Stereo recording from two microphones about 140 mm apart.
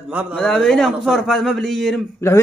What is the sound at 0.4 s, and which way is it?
Speech, 5° left (ahead or behind).